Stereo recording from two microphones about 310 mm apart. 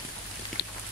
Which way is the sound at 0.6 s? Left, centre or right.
Left.